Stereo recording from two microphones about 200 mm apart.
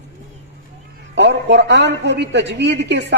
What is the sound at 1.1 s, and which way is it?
A man's voice, 60° right (ahead or behind).